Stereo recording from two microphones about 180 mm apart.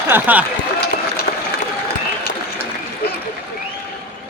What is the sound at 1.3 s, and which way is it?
Applause, 50° left (ahead or behind).